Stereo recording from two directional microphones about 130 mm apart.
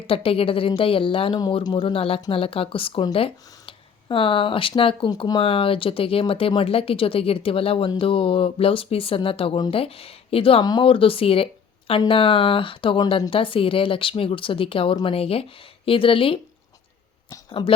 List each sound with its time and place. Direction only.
0.1 s speech: 45° left (ahead or behind)
10.6 s speech: 35° left (ahead or behind)
17.2 s a sound: 35° left (ahead or behind)